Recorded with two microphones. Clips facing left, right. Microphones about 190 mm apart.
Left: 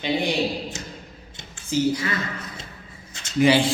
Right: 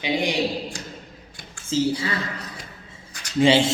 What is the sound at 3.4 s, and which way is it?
Speech, 25° right (ahead or behind).